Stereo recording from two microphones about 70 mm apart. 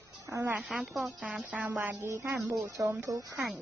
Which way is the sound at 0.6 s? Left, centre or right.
Centre.